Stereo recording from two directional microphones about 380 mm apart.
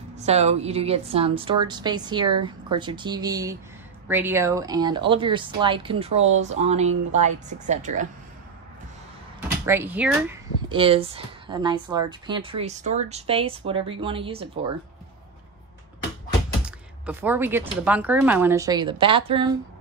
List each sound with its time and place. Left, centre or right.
0.2 s speech: centre
9.7 s speech: centre
16.6 s speech: centre